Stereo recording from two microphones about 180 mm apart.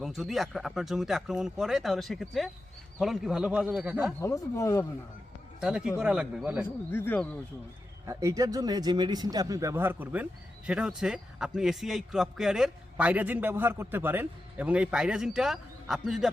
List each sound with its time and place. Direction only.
0.0 s a man's voice: centre (ahead or behind)
4.2 s speech: 15° left (ahead or behind)
5.5 s a man's voice: 5° right (ahead or behind)
6.9 s speech: 10° left (ahead or behind)
8.0 s a man's voice: 15° right (ahead or behind); by 16.3 s centre (ahead or behind)